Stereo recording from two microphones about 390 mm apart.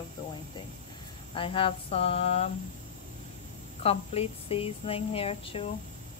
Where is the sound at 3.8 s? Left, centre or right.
Centre.